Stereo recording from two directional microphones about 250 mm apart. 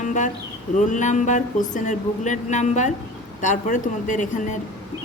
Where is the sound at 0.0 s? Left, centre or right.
Left.